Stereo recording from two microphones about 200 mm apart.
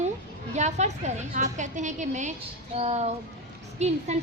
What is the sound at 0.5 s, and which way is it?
A woman's voice, 35° right (ahead or behind).